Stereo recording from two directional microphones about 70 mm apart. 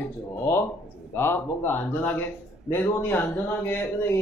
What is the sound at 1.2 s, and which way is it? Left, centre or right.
Speech, left.